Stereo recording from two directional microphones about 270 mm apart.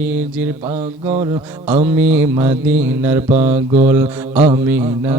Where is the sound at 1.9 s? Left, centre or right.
Centre.